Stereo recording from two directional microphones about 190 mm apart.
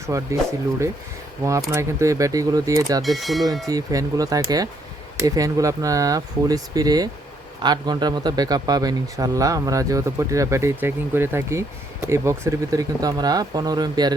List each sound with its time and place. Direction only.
0.1 s speech: 15° right (ahead or behind)
1.7 s speech: 15° right (ahead or behind)
3.0 s speech: centre (ahead or behind)
3.7 s speech: 20° right (ahead or behind)